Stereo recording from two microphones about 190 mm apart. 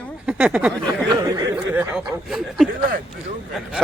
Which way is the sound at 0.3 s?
10° right (ahead or behind).